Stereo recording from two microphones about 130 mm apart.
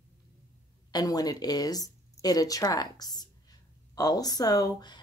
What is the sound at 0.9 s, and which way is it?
Speech, 30° left (ahead or behind).